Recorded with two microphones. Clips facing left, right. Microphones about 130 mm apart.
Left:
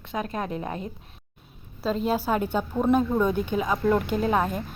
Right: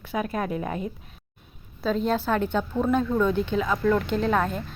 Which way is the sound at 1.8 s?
Centre (ahead or behind).